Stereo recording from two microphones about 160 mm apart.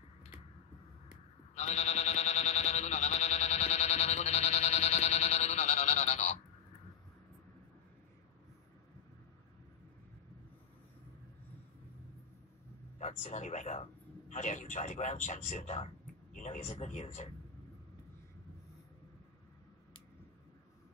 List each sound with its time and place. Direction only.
1.5 s sheep: 45° left (ahead or behind)
13.0 s a man's voice: 45° left (ahead or behind)